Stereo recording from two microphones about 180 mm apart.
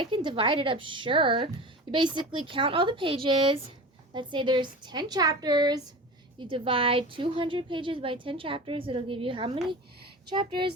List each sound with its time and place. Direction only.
0.0 s a woman's voice: 25° right (ahead or behind)